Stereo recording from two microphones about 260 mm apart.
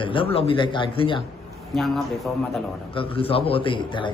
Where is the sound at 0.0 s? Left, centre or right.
Centre.